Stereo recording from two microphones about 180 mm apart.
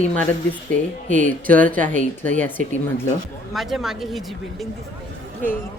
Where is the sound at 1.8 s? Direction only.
45° right (ahead or behind).